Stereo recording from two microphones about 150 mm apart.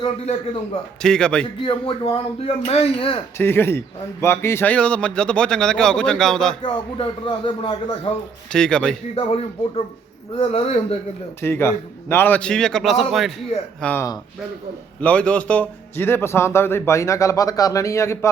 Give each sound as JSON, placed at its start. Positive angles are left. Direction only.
{"t": 1.0, "sound": "a man's voice", "side_deg": 5}
{"t": 1.6, "sound": "speech", "side_deg": 35}
{"t": 3.3, "sound": "a man's voice", "side_deg": 15}
{"t": 6.6, "sound": "speech", "side_deg": 35}
{"t": 8.5, "sound": "a man's voice", "side_deg": 5}
{"t": 9.1, "sound": "speech", "side_deg": 40}
{"t": 11.4, "sound": "a man's voice", "side_deg": 15}
{"t": 13.8, "sound": "a man's voice", "side_deg": 15}